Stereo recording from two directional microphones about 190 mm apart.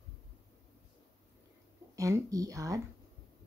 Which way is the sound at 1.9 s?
15° right (ahead or behind).